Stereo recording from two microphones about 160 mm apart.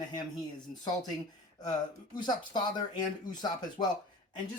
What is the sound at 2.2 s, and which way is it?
Speech, 25° left (ahead or behind).